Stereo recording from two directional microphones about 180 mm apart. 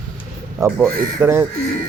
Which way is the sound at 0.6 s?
10° right (ahead or behind).